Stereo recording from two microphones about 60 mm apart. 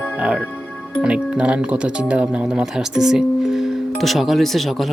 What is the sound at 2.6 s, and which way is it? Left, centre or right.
Speech, centre.